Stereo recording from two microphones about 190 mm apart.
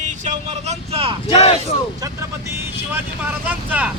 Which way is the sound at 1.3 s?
30° left (ahead or behind).